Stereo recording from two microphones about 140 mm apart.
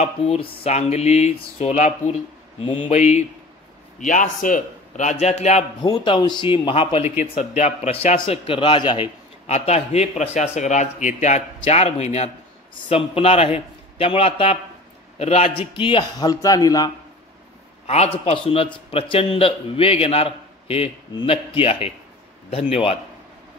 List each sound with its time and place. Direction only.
0.0 s a man's voice: 45° left (ahead or behind)
2.6 s a man's voice: 40° left (ahead or behind)
4.0 s a man's voice: 65° left (ahead or behind)
5.8 s a man's voice: 30° left (ahead or behind)
9.5 s a man's voice: 50° left (ahead or behind)
12.7 s a man's voice: 40° left (ahead or behind)
17.8 s a man's voice: 45° left (ahead or behind)